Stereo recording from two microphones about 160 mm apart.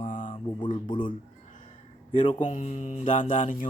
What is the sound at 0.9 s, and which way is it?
Speech, 55° left (ahead or behind).